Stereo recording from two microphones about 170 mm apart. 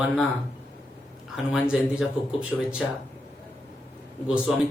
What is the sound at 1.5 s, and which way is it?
Speech, 5° right (ahead or behind).